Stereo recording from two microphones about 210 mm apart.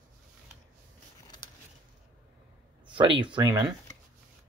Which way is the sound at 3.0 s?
25° right (ahead or behind).